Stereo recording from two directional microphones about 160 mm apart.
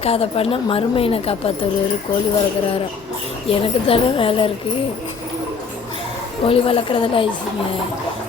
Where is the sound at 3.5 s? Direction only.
35° left (ahead or behind).